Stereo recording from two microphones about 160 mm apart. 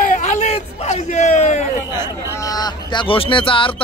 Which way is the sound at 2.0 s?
25° left (ahead or behind).